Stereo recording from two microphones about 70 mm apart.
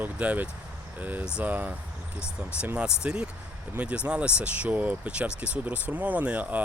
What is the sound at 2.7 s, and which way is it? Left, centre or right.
Speech, centre.